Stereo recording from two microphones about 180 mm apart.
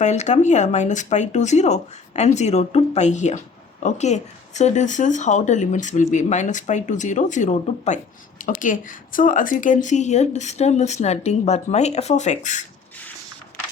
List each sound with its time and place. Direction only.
0.0 s a woman's voice: 40° left (ahead or behind)